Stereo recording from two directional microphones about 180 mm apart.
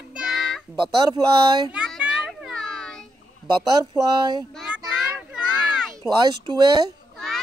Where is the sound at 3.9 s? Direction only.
25° right (ahead or behind).